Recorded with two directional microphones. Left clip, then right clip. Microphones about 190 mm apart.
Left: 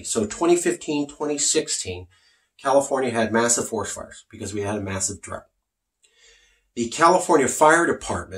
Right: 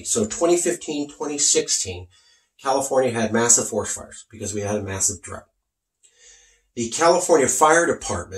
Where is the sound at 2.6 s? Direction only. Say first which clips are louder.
Even; 20° left (ahead or behind).